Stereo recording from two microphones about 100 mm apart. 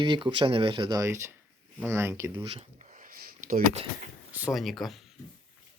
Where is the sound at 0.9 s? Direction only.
30° right (ahead or behind).